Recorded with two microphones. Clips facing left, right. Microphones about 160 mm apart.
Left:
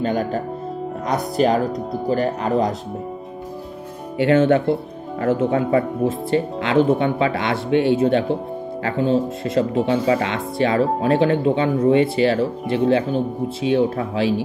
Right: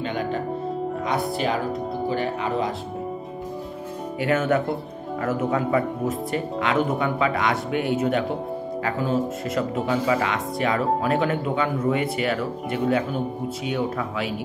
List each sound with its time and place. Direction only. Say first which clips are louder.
0.0 s music: left 5 dB; 40° left (ahead or behind)
1.0 s speech: left 7 dB; 40° left (ahead or behind)
4.2 s speech: left 7 dB; 30° left (ahead or behind)